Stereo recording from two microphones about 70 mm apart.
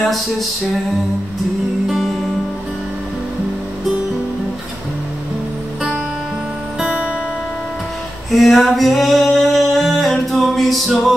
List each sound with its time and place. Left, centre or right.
0.0 s a sound: centre
1.9 s music: centre
6.8 s music: centre
8.3 s singing: centre